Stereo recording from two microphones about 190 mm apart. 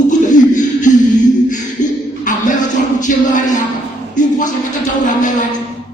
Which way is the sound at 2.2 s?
45° left (ahead or behind).